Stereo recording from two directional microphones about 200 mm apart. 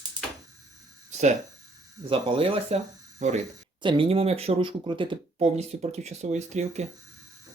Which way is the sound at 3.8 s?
25° right (ahead or behind).